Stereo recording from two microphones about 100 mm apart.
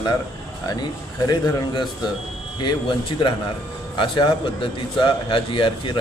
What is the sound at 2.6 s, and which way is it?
A man's voice, 55° left (ahead or behind).